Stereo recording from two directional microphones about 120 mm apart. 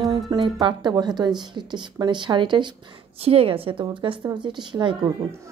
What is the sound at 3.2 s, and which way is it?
A woman's voice, 55° right (ahead or behind).